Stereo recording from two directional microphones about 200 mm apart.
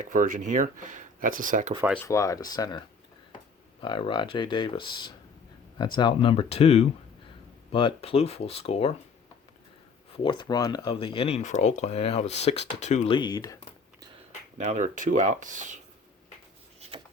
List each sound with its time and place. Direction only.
0.0 s speech: 40° right (ahead or behind)
2.0 s speech: 15° left (ahead or behind); by 8.9 s 30° left (ahead or behind)
10.2 s speech: 20° left (ahead or behind)
13.1 s speech: 20° left (ahead or behind)
14.6 s speech: 40° right (ahead or behind)